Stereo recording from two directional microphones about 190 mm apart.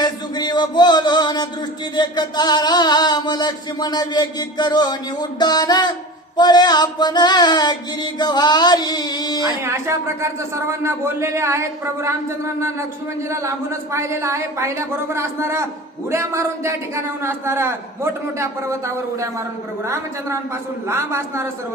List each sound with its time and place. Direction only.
0.0 s a sound: 20° left (ahead or behind)
9.4 s a man's voice: 15° right (ahead or behind)
13.3 s a man's voice: 15° right (ahead or behind)